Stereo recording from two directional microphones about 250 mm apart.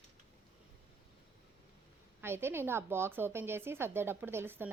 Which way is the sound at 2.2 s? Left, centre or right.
Centre.